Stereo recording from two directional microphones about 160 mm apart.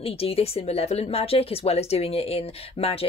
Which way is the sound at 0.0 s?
35° left (ahead or behind).